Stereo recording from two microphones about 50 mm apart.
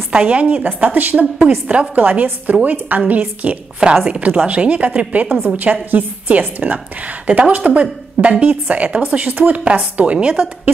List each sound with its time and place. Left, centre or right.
0.2 s a woman's voice: right
3.8 s a woman's voice: centre
4.1 s a woman's voice: right